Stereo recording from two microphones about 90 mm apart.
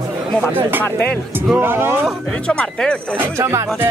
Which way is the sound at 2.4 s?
10° left (ahead or behind).